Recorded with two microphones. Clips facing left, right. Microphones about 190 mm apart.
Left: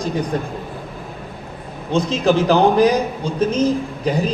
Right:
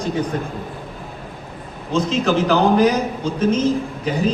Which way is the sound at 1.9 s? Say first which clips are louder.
Left 2 dB; 35° left (ahead or behind).